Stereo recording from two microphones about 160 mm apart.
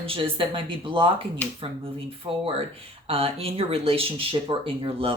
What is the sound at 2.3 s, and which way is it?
Speech, 35° right (ahead or behind).